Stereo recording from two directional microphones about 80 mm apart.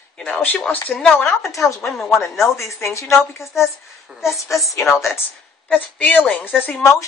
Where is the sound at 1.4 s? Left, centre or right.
Left.